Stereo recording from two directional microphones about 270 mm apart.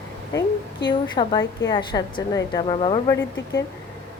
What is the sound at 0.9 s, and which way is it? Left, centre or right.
A woman's voice, centre.